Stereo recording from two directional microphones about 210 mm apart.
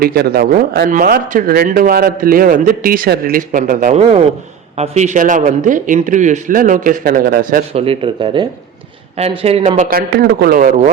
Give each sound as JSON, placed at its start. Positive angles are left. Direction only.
{"t": 0.0, "sound": "a man's voice", "side_deg": -45}
{"t": 7.7, "sound": "speech", "side_deg": -25}
{"t": 9.9, "sound": "speech", "side_deg": -45}